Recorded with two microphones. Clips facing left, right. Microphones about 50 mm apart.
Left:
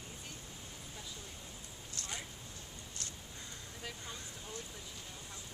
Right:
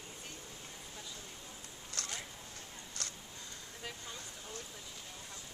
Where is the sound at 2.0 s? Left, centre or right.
Right.